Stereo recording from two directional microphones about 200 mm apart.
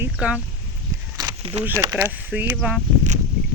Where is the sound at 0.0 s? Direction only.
5° right (ahead or behind).